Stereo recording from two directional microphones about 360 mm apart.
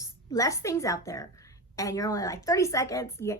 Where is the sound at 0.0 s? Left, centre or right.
Centre.